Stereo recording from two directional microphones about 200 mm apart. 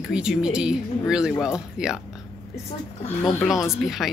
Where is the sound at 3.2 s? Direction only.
15° left (ahead or behind).